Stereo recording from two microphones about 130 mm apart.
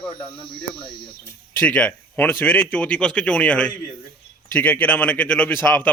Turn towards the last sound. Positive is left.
turn(degrees=15)  # may be behind; listen again after turning